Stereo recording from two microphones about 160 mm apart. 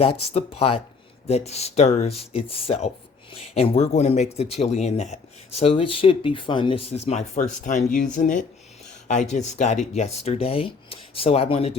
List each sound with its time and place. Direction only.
0.0 s speech: 35° left (ahead or behind)